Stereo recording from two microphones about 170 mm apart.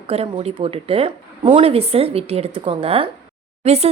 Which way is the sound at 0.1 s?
35° right (ahead or behind).